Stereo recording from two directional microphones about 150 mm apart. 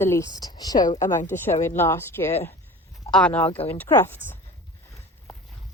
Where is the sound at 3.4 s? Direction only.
40° left (ahead or behind).